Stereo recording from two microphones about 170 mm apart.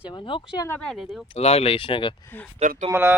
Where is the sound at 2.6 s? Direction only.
45° right (ahead or behind).